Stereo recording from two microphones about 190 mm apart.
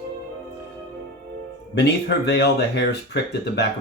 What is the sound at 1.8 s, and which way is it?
Speech, 60° left (ahead or behind).